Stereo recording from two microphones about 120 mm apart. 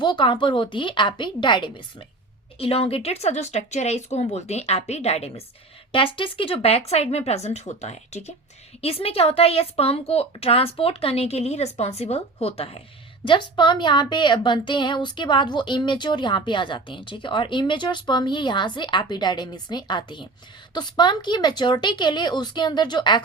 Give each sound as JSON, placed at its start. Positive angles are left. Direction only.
{"t": 0.0, "sound": "a woman's voice", "side_deg": 40}
{"t": 5.9, "sound": "a woman's voice", "side_deg": 45}
{"t": 8.8, "sound": "a woman's voice", "side_deg": 55}
{"t": 13.2, "sound": "a woman's voice", "side_deg": 40}